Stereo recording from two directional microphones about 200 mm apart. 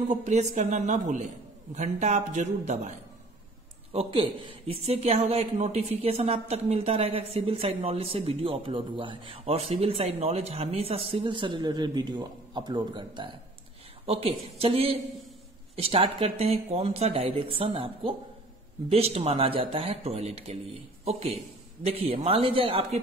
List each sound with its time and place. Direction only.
0.1 s speech: 35° right (ahead or behind)